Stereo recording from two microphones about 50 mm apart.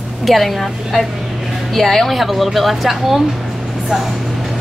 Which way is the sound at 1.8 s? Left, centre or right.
Centre.